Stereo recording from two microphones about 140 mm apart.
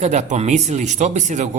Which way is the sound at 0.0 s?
55° right (ahead or behind).